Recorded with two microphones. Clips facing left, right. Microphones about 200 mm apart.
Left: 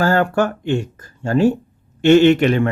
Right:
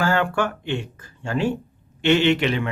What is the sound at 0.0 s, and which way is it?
Speech, 40° left (ahead or behind).